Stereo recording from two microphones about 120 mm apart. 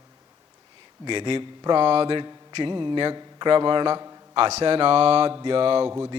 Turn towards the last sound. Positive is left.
turn(degrees=-45)  # may be behind; listen again after turning